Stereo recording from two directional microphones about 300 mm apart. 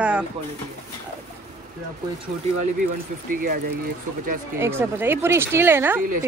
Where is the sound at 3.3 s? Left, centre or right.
Right.